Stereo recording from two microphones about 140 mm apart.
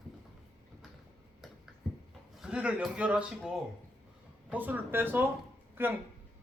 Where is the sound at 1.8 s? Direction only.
Centre (ahead or behind).